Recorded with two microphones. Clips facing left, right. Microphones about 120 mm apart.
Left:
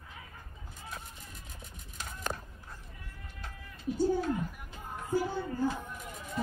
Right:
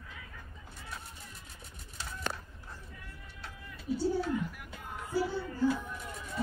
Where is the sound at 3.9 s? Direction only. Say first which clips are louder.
Left 2 dB; 45° left (ahead or behind).